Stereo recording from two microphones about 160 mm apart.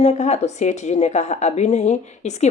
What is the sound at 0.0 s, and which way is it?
A woman's voice, 45° left (ahead or behind).